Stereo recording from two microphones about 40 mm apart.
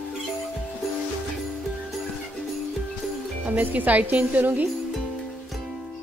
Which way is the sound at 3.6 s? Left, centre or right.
Right.